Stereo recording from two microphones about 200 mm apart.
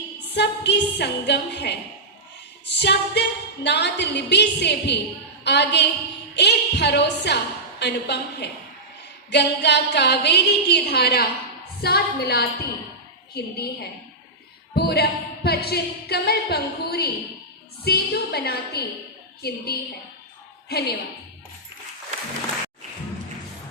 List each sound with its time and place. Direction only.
0.3 s a woman's voice: 55° left (ahead or behind)
14.8 s speech: 50° left (ahead or behind)